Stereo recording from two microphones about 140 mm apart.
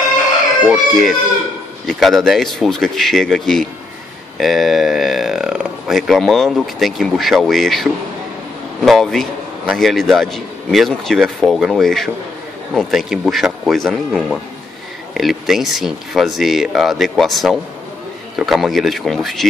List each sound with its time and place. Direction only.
0.7 s a man's voice: centre (ahead or behind)